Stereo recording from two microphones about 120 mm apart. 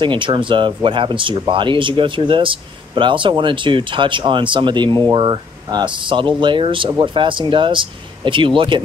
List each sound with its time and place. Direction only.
0.0 s speech: 45° right (ahead or behind)